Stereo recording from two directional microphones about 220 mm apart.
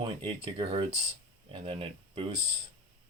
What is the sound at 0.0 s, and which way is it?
Speech, 25° right (ahead or behind).